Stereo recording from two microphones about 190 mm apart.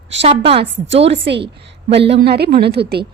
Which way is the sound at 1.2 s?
65° right (ahead or behind).